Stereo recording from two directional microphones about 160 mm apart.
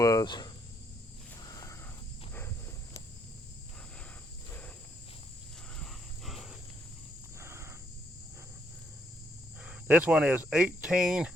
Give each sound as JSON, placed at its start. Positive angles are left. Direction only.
{"t": 0.0, "sound": "cricket", "side_deg": 25}
{"t": 5.8, "sound": "a sound", "side_deg": 0}
{"t": 7.3, "sound": "cricket", "side_deg": -15}
{"t": 9.6, "sound": "speech", "side_deg": -10}